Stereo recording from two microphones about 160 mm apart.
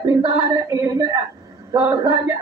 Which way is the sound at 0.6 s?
20° right (ahead or behind).